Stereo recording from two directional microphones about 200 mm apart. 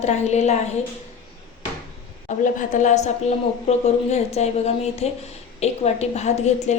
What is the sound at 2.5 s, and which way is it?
A woman's voice, 35° left (ahead or behind).